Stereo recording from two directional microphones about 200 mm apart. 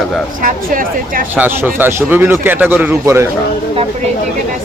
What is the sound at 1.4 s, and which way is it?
Speech, 10° right (ahead or behind).